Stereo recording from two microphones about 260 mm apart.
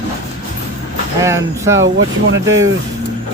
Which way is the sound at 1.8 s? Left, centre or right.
Right.